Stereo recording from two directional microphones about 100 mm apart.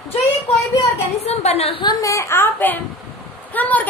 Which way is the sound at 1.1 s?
90° left.